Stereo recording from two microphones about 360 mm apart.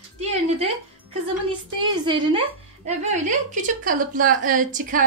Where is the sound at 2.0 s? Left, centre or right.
Centre.